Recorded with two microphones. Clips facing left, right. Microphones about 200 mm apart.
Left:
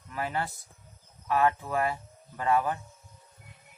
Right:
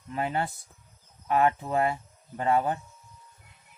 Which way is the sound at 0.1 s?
25° right (ahead or behind).